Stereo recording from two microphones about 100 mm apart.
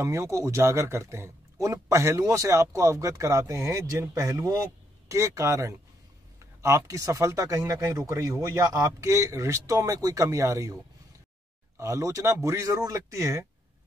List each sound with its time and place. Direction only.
0.0 s a man's voice: 30° right (ahead or behind)